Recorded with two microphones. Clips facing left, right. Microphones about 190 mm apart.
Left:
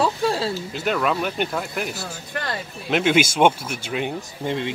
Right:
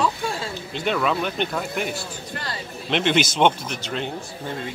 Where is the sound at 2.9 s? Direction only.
5° left (ahead or behind).